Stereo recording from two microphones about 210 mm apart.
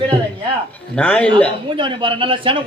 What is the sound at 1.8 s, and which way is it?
Speech, 25° right (ahead or behind).